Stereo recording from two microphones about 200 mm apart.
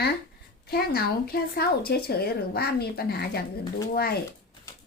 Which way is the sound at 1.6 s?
50° left (ahead or behind).